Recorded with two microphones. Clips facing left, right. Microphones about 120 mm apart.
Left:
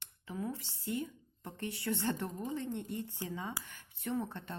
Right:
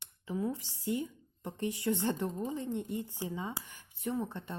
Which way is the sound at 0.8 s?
15° right (ahead or behind).